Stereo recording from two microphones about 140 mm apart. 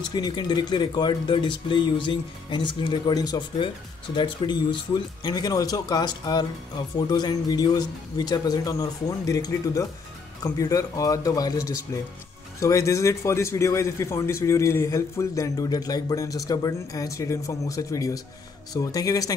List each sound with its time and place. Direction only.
0.0 s speech: 30° left (ahead or behind)